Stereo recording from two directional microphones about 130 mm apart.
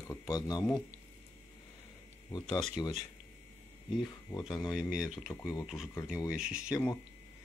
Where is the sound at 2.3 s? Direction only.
35° left (ahead or behind).